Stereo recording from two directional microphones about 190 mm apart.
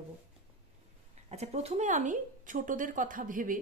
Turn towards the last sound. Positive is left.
turn(degrees=-45)  # may be behind; listen again after turning